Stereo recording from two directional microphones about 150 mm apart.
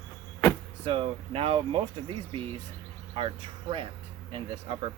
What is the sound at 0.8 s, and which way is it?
Speech, 40° right (ahead or behind).